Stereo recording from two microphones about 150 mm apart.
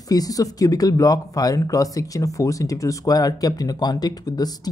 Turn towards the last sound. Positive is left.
turn(degrees=25)  # may be behind; listen again after turning